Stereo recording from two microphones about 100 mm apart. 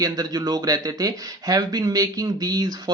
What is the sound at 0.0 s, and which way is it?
Speech, 40° right (ahead or behind).